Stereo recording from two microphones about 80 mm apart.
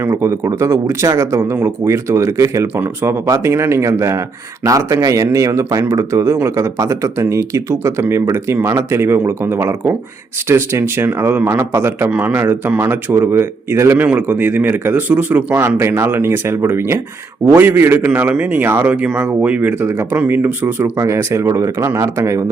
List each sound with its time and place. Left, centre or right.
0.0 s speech: right
2.8 s a man's voice: right
3.2 s a man's voice: right
14.0 s a man's voice: right
15.6 s a man's voice: right
20.9 s speech: right